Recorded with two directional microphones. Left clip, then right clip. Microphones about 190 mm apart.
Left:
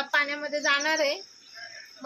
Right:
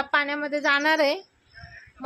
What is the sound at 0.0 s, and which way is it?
A woman's voice, 65° right (ahead or behind).